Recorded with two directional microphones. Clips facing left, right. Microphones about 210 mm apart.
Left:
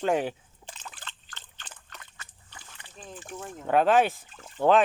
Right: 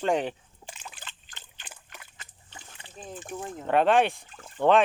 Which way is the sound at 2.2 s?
20° right (ahead or behind).